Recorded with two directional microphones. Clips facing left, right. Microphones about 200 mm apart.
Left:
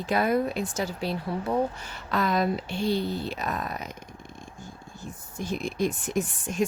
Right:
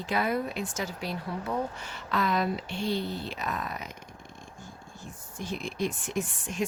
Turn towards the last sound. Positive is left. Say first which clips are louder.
# left 4 dB
turn(degrees=40)  # may be behind; listen again after turning